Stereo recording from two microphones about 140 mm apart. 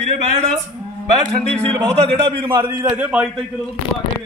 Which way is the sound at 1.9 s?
40° right (ahead or behind).